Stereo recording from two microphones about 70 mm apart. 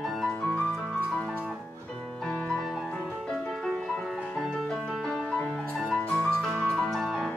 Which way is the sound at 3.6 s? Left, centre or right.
Centre.